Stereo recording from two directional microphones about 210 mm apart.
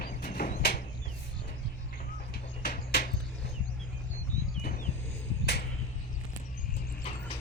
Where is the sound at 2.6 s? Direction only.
45° left (ahead or behind).